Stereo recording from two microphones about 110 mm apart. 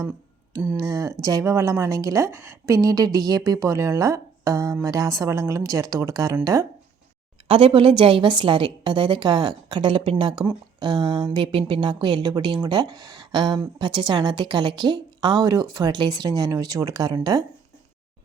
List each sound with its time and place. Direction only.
0.8 s speech: 30° right (ahead or behind)
7.4 s a woman's voice: 55° right (ahead or behind); by 17.4 s 35° right (ahead or behind)